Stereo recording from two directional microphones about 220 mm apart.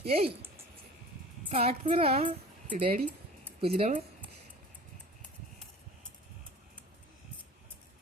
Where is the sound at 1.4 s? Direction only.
30° right (ahead or behind).